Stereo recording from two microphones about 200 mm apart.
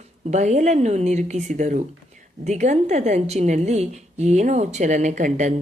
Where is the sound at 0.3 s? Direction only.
35° right (ahead or behind).